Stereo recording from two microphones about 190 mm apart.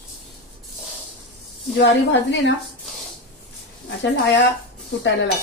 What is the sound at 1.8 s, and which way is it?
Speech, 70° left (ahead or behind).